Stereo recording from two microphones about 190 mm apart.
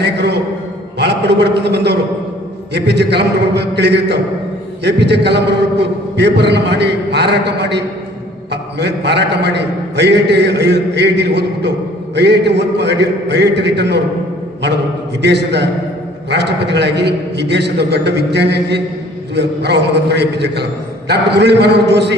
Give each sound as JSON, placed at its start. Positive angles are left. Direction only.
{"t": 0.0, "sound": "a man's voice", "side_deg": -65}
{"t": 15.2, "sound": "a man's voice", "side_deg": -65}